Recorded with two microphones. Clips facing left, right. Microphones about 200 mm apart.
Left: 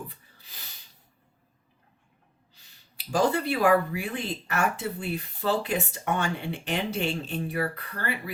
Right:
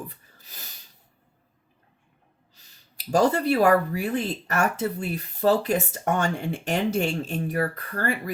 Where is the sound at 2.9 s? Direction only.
40° right (ahead or behind).